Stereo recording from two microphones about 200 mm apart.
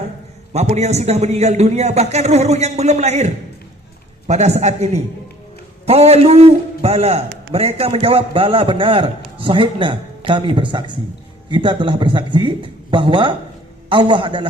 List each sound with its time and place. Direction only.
0.5 s a man's voice: 35° right (ahead or behind)